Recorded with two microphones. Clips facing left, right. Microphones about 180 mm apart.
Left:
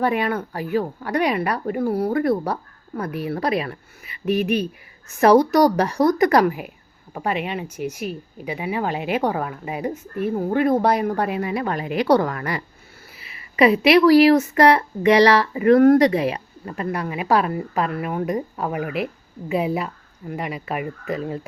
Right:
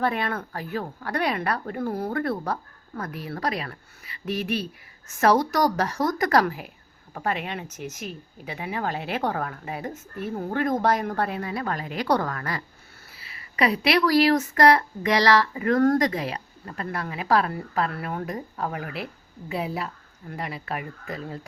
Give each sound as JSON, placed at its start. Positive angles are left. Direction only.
{"t": 0.0, "sound": "speech", "side_deg": 10}